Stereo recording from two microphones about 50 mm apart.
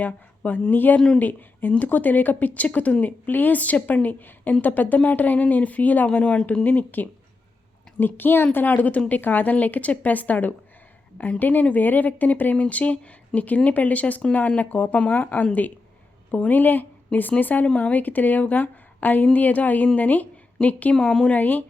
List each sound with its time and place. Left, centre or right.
0.0 s speech: left
6.1 s a woman's voice: left